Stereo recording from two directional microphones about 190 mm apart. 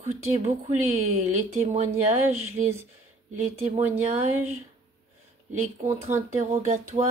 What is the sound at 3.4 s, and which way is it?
Speech, 35° right (ahead or behind).